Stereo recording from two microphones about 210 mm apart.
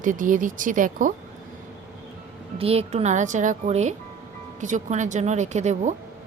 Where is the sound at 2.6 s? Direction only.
30° right (ahead or behind).